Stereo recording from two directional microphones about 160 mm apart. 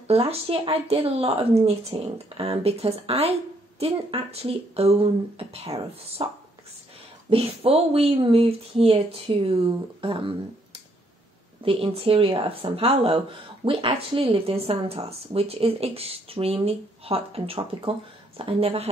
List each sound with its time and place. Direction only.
0.1 s speech: 40° right (ahead or behind)
7.2 s speech: 35° right (ahead or behind)